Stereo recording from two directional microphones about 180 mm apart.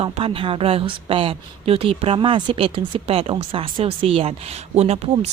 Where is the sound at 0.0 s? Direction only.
30° right (ahead or behind).